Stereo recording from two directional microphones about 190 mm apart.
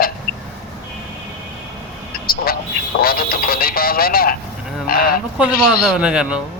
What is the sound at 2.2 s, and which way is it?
Vehicle, 50° left (ahead or behind).